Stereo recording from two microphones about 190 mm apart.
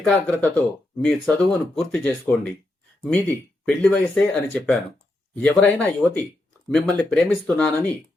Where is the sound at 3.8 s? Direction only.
5° left (ahead or behind).